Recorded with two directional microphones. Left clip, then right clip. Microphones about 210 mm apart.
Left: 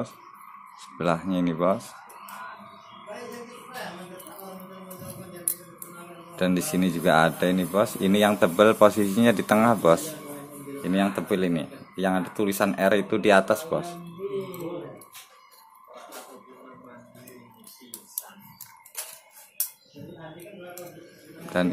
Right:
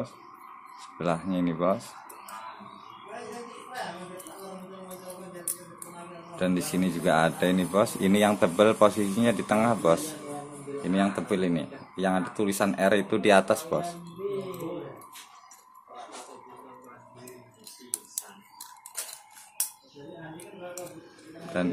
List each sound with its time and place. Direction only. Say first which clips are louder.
0.7 s a man's voice: left 3 dB; 15° left (ahead or behind)
6.3 s a man's voice: left 3 dB; 15° left (ahead or behind)
21.5 s a man's voice: left 4 dB; 15° left (ahead or behind)